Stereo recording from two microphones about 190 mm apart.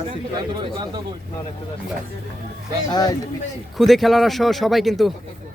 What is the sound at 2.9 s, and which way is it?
Speech, 20° left (ahead or behind).